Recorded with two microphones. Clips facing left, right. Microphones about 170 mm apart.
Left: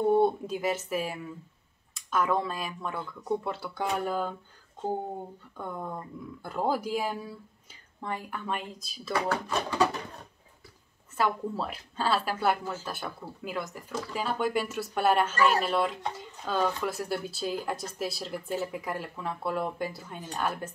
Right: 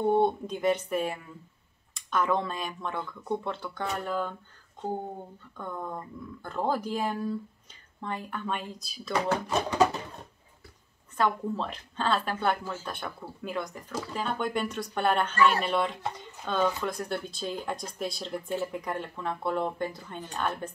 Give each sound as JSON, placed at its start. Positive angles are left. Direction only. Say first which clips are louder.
{"t": 0.1, "sound": "a woman's voice", "louder": "left 1 dB", "side_deg": 5}
{"t": 5.6, "sound": "a woman's voice", "louder": "even", "side_deg": 10}
{"t": 9.1, "sound": "speech", "louder": "right 2 dB", "side_deg": -20}
{"t": 11.1, "sound": "a woman's voice", "louder": "right 1 dB", "side_deg": 5}